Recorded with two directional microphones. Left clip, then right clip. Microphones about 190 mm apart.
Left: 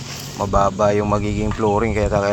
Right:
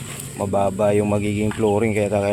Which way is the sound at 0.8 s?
20° right (ahead or behind).